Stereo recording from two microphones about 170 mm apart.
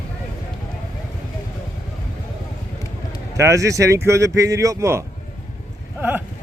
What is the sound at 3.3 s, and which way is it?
Speech, 20° right (ahead or behind).